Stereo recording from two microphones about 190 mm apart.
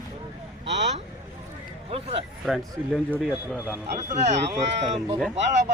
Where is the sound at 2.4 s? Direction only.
Centre (ahead or behind).